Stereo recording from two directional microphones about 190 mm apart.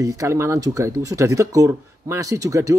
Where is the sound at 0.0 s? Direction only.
15° right (ahead or behind).